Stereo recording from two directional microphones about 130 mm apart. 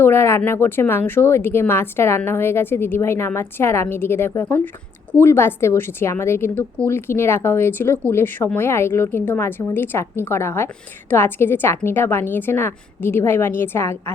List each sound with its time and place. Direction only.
0.0 s speech: 20° left (ahead or behind)